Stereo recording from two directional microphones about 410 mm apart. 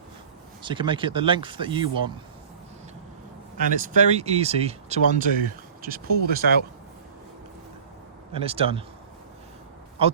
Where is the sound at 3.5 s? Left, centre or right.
Centre.